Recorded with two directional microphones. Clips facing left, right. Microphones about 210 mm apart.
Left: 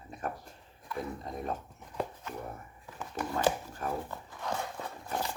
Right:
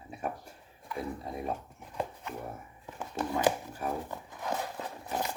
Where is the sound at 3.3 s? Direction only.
15° right (ahead or behind).